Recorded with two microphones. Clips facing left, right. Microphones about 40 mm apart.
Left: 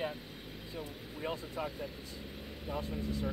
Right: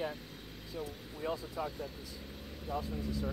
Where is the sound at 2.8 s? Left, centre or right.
Left.